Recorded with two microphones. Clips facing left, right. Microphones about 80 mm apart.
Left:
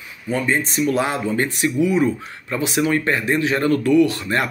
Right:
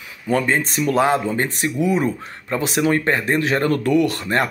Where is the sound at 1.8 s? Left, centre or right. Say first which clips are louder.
Left 1 dB; right.